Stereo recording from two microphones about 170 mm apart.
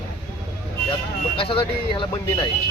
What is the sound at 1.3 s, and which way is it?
Speech, 30° left (ahead or behind).